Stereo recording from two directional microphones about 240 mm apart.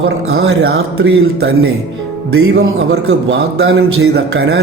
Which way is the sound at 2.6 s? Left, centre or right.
Right.